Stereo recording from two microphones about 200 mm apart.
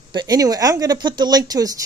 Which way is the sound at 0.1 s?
20° right (ahead or behind).